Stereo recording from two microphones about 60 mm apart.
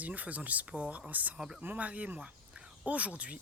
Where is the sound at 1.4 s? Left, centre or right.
Centre.